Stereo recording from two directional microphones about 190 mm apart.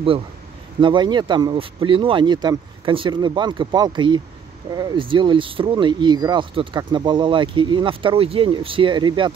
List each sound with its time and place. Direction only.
0.7 s speech: 25° right (ahead or behind)